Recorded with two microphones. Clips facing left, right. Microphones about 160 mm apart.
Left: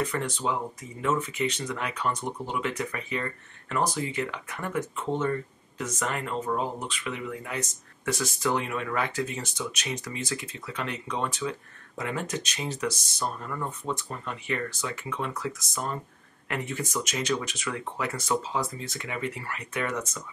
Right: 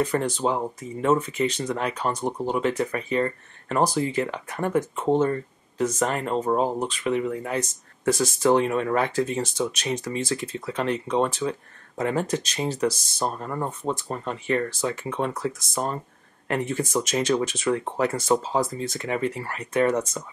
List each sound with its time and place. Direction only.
0.0 s speech: 35° right (ahead or behind)